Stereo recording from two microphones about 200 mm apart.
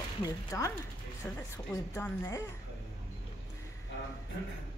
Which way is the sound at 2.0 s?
15° left (ahead or behind).